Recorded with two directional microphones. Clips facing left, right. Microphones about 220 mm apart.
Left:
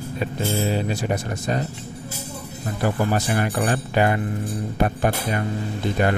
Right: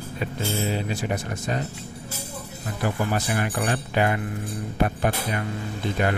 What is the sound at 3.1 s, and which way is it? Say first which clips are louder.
Speech: left 3 dB; 40° left (ahead or behind).